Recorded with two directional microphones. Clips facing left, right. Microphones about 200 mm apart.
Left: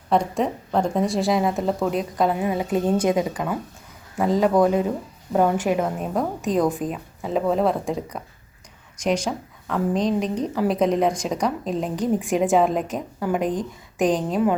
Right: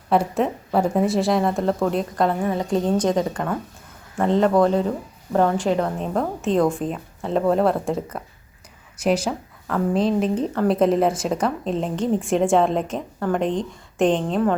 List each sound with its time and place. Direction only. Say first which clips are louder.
0.1 s a woman's voice: right 1 dB; 5° right (ahead or behind)